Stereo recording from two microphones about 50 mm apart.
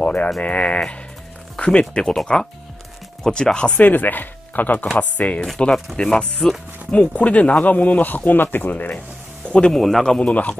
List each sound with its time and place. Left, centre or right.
0.0 s sheep: left
0.4 s speech: left
3.3 s speech: centre
3.8 s speech: left
6.4 s speech: centre
6.9 s speech: left
9.5 s speech: centre
9.8 s a man's voice: centre
10.0 s speech: centre